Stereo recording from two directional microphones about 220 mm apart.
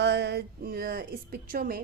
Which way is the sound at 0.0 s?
50° right (ahead or behind).